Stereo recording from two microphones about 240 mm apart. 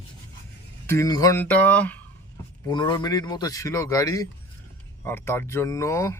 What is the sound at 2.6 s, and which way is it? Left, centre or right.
Speech, centre.